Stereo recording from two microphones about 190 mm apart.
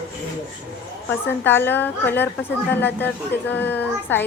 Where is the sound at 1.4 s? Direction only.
10° left (ahead or behind).